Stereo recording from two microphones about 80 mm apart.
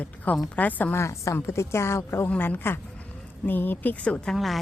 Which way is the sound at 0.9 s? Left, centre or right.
Left.